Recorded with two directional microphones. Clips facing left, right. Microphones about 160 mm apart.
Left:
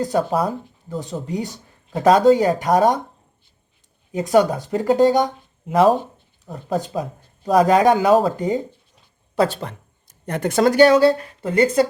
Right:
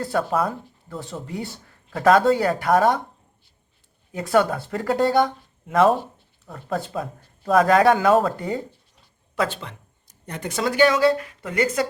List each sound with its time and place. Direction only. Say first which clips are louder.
0.0 s speech: left 3 dB; 20° left (ahead or behind)
4.1 s speech: left 4 dB; 20° left (ahead or behind)
9.3 s speech: left 6 dB; 35° left (ahead or behind)